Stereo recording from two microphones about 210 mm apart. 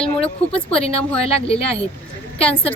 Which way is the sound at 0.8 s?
30° left (ahead or behind).